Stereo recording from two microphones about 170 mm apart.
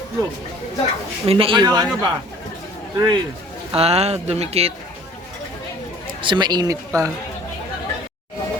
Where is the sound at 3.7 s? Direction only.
35° right (ahead or behind).